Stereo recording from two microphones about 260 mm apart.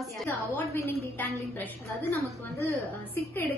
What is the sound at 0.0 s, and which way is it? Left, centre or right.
A woman's voice, centre.